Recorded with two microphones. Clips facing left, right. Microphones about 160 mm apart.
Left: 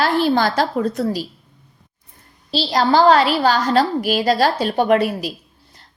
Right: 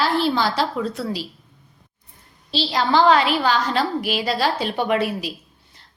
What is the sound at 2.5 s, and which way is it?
A woman's voice, 40° left (ahead or behind).